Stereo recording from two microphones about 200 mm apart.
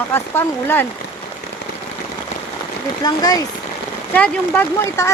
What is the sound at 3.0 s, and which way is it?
Speech, 20° left (ahead or behind).